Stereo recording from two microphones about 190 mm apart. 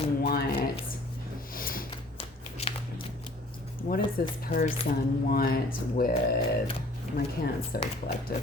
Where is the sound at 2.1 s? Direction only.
30° left (ahead or behind).